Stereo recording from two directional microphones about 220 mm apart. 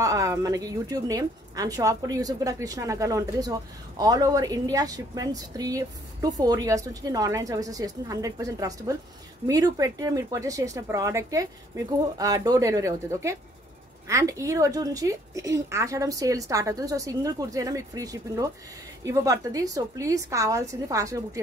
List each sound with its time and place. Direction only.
0.0 s a woman's voice: 15° right (ahead or behind)